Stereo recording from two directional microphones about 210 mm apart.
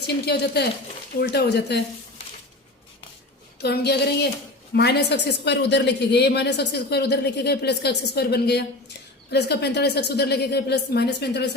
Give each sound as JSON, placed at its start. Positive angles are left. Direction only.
{"t": 0.0, "sound": "a woman's voice", "side_deg": 50}
{"t": 3.6, "sound": "a woman's voice", "side_deg": 50}